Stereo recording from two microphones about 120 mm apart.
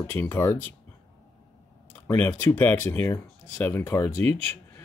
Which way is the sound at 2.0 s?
15° left (ahead or behind).